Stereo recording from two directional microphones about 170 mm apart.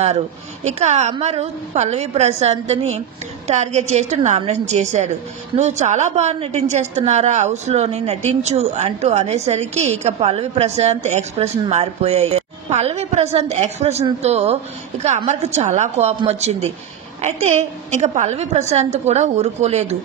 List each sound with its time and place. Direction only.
0.7 s a woman's voice: 40° right (ahead or behind)